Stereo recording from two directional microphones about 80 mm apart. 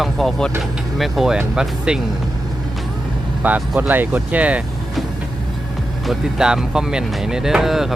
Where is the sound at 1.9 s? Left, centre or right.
Centre.